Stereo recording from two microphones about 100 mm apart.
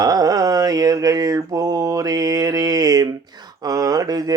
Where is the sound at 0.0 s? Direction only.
40° right (ahead or behind).